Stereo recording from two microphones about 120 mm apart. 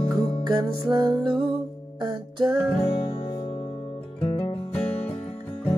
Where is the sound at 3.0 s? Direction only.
50° left (ahead or behind).